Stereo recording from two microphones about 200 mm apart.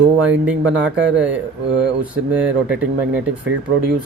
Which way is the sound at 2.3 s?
5° right (ahead or behind).